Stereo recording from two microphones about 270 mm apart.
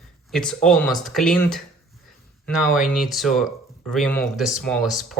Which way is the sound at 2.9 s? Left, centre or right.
Centre.